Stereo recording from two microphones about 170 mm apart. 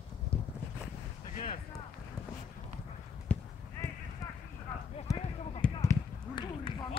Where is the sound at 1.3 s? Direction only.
50° left (ahead or behind).